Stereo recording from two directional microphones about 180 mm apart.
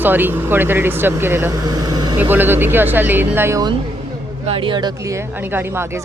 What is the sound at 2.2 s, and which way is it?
Speech, 10° right (ahead or behind).